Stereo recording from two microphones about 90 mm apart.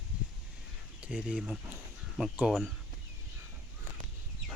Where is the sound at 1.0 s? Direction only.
10° right (ahead or behind).